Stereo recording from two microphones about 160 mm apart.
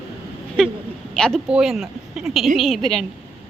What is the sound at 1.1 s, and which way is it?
A woman's voice, 5° left (ahead or behind).